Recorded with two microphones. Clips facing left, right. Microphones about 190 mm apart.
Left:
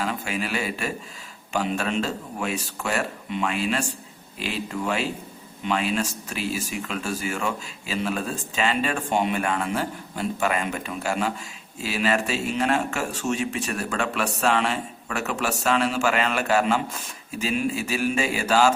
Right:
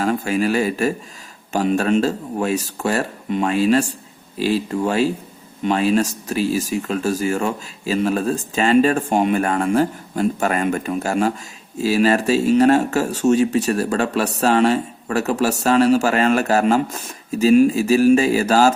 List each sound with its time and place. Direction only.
0.0 s speech: 45° right (ahead or behind)